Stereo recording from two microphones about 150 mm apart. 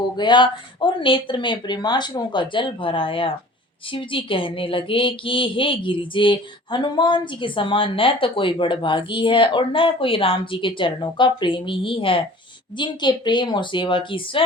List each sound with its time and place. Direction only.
0.2 s speech: 30° left (ahead or behind)